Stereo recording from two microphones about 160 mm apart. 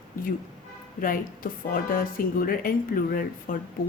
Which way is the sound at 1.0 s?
60° left (ahead or behind).